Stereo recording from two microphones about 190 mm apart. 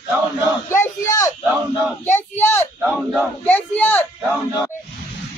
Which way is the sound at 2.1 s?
10° left (ahead or behind).